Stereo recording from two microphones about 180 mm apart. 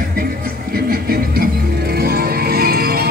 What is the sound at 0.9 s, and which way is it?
Music, 55° right (ahead or behind).